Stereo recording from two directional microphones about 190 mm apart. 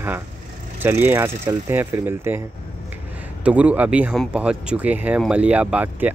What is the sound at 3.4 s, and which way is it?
Speech, 5° right (ahead or behind).